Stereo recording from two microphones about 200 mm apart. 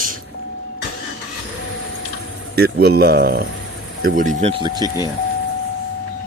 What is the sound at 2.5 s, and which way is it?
Speech, 50° right (ahead or behind).